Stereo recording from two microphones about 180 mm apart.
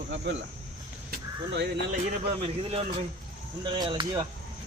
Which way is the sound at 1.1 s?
75° right (ahead or behind).